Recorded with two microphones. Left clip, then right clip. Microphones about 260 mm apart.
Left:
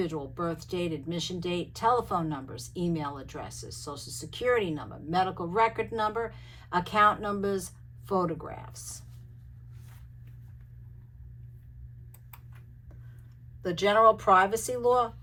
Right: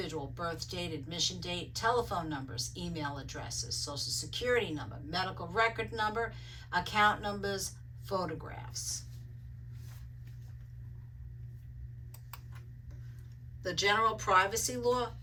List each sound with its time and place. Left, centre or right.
0.0 s speech: centre
13.6 s speech: centre